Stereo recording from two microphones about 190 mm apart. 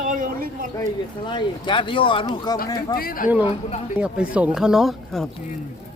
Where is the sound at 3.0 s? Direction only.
50° left (ahead or behind).